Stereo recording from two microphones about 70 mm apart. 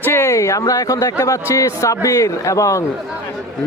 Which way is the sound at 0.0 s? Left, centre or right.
Left.